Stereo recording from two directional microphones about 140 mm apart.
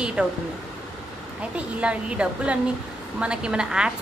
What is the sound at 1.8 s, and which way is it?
A woman's voice, 10° right (ahead or behind).